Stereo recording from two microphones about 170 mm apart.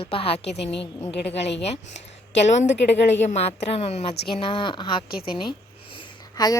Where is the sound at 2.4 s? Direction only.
45° left (ahead or behind).